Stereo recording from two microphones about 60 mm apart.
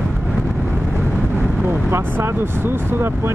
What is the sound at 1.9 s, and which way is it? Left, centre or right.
Speech, right.